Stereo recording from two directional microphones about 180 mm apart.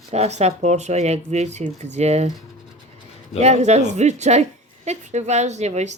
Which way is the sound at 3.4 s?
40° right (ahead or behind).